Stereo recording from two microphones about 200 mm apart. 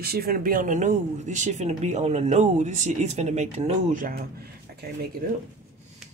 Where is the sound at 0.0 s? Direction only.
50° right (ahead or behind).